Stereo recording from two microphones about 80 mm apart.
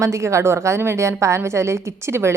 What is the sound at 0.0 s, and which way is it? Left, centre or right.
A woman's voice, right.